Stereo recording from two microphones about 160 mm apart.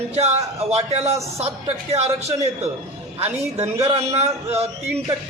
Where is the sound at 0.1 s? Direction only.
40° right (ahead or behind).